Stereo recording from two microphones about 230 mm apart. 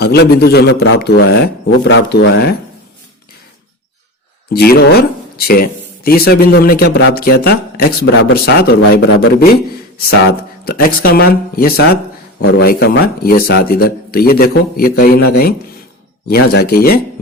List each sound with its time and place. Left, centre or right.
0.0 s speech: left
4.5 s a man's voice: left
10.7 s a man's voice: left